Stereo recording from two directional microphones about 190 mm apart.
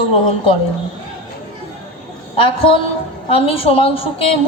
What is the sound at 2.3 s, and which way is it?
A woman's voice, 30° left (ahead or behind).